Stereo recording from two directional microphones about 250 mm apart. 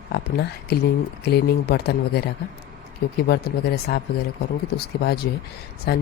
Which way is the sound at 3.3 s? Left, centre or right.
Left.